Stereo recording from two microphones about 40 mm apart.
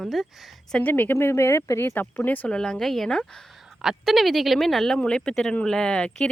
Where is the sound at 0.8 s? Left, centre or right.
Left.